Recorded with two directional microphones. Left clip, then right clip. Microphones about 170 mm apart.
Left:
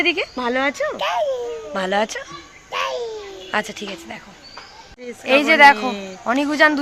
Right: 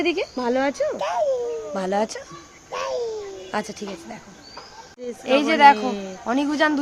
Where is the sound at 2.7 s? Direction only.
15° right (ahead or behind).